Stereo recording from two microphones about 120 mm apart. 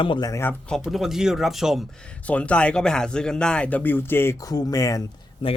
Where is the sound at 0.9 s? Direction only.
Centre (ahead or behind).